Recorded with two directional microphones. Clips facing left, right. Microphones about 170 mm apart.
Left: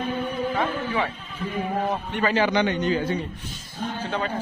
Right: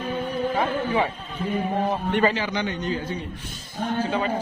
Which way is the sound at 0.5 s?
25° right (ahead or behind).